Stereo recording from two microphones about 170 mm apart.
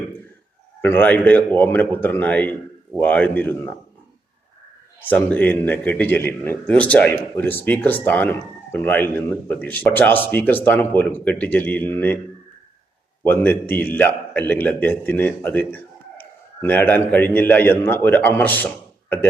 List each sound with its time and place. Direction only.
0.8 s a man's voice: 10° left (ahead or behind)
4.9 s a man's voice: 10° left (ahead or behind)
13.2 s a man's voice: 10° left (ahead or behind)